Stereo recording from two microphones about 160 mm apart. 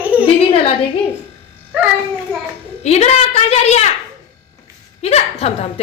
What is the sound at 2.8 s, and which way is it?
A woman's voice, 45° left (ahead or behind).